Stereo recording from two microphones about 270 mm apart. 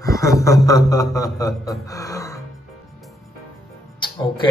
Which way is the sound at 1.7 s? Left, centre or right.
Centre.